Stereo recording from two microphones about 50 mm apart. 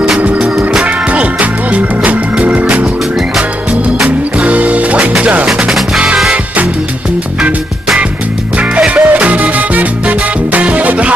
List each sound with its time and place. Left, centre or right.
1.1 s music: right
4.4 s music: right
8.7 s music: right